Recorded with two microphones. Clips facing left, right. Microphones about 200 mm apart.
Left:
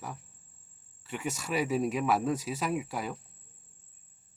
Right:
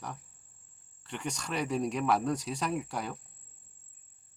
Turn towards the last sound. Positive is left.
turn(degrees=5)  # may be behind; listen again after turning